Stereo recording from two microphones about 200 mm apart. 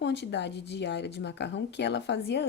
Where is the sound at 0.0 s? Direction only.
60° left (ahead or behind).